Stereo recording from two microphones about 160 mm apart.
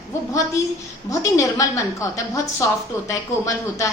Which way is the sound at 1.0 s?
20° left (ahead or behind).